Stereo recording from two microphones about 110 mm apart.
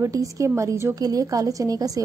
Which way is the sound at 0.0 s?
30° right (ahead or behind).